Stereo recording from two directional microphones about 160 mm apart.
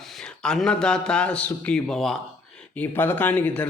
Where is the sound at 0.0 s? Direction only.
Centre (ahead or behind).